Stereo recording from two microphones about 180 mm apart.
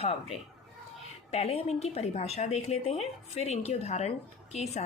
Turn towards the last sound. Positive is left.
turn(degrees=35)  # may be behind; listen again after turning